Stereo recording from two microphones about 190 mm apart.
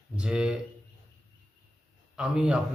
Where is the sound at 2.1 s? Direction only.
5° right (ahead or behind).